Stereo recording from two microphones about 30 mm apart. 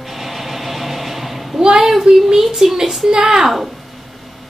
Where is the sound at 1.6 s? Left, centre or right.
Centre.